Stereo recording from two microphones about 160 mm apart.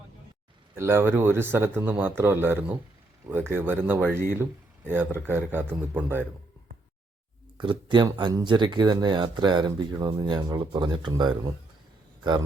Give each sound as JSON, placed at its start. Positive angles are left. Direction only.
{"t": 0.8, "sound": "a man's voice", "side_deg": -15}
{"t": 7.6, "sound": "speech", "side_deg": -30}